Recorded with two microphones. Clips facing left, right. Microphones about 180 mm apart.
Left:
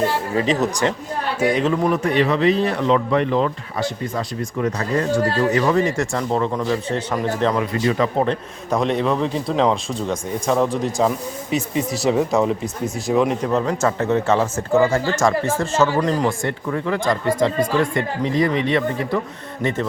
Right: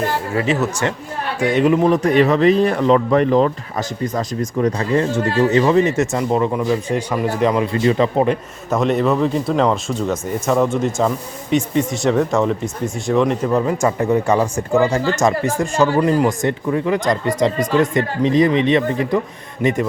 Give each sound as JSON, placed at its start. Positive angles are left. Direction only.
{"t": 0.3, "sound": "speech", "side_deg": 15}
{"t": 1.4, "sound": "speech", "side_deg": 0}
{"t": 1.6, "sound": "speech", "side_deg": -20}
{"t": 1.9, "sound": "speech", "side_deg": -40}
{"t": 7.6, "sound": "speech", "side_deg": -25}
{"t": 8.2, "sound": "speech", "side_deg": -5}
{"t": 13.5, "sound": "speech", "side_deg": -10}
{"t": 16.4, "sound": "speech", "side_deg": -20}